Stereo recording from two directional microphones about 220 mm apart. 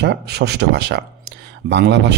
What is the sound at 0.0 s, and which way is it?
Speech, 50° right (ahead or behind).